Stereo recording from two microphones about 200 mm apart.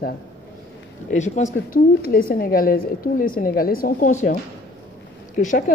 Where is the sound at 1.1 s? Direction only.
35° left (ahead or behind).